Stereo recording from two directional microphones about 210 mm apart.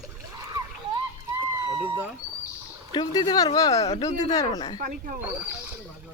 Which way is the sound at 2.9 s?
20° left (ahead or behind).